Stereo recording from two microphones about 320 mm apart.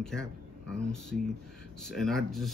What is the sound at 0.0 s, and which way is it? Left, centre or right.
Speech, centre.